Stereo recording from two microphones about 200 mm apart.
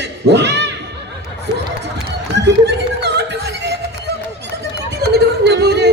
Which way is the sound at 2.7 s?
55° right (ahead or behind).